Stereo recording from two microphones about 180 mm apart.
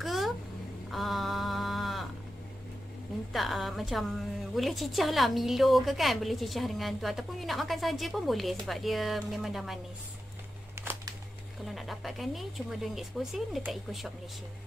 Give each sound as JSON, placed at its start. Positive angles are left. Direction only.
{"t": 0.0, "sound": "a sound", "side_deg": 0}
{"t": 3.3, "sound": "a woman's voice", "side_deg": 0}
{"t": 11.6, "sound": "a woman's voice", "side_deg": 0}